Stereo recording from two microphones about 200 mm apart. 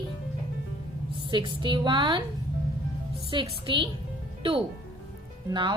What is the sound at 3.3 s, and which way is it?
Speech, 25° right (ahead or behind).